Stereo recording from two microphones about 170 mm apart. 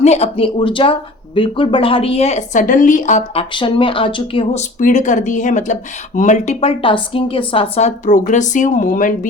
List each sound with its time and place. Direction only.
0.0 s a woman's voice: 40° left (ahead or behind)
3.5 s a woman's voice: 30° left (ahead or behind)
4.8 s speech: 45° left (ahead or behind)